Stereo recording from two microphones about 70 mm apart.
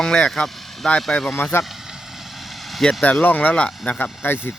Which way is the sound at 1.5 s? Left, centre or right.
Left.